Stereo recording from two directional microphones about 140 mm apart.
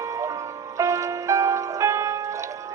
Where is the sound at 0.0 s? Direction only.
20° right (ahead or behind).